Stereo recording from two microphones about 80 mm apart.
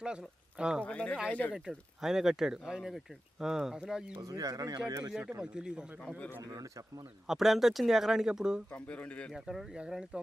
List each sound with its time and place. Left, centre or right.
0.0 s speech: centre
0.9 s speech: centre
1.5 s speech: centre
4.2 s speech: right
5.4 s speech: centre
6.0 s speech: centre
6.4 s speech: right
7.3 s speech: centre
8.7 s speech: centre
9.3 s speech: centre